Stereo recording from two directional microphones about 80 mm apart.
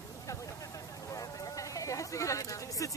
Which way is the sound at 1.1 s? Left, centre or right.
Left.